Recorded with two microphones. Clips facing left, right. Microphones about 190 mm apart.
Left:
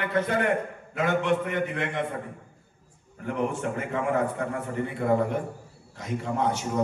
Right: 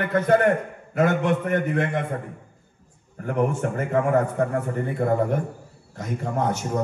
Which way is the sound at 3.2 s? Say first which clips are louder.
Right 4 dB; 45° right (ahead or behind).